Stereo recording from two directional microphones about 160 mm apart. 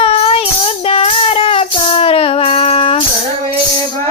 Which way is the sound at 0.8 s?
35° left (ahead or behind).